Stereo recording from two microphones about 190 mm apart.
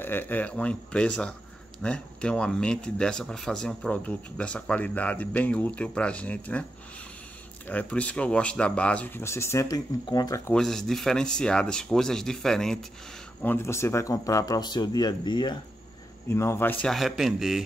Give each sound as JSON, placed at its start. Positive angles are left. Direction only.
{"t": 0.0, "sound": "speech", "side_deg": 10}
{"t": 7.6, "sound": "speech", "side_deg": 10}
{"t": 10.5, "sound": "speech", "side_deg": 5}